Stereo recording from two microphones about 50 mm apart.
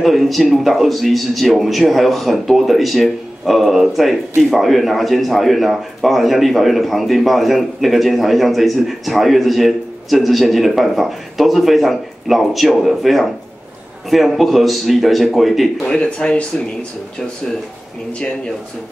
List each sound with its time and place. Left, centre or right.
0.0 s a man's voice: centre
15.9 s speech: centre